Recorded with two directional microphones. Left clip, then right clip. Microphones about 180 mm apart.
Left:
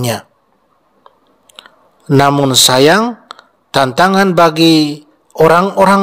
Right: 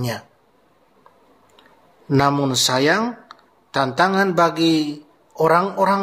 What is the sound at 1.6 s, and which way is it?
Clicking, 55° left (ahead or behind).